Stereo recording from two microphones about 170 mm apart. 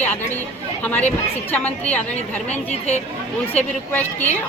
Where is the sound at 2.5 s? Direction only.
40° left (ahead or behind).